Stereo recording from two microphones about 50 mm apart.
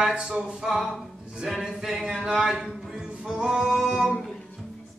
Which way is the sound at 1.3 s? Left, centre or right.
Centre.